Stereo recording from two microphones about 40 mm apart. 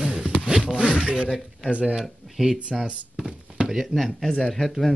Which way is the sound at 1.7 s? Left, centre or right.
Right.